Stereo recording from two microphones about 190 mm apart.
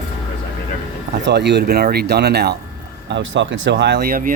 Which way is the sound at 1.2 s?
65° right (ahead or behind).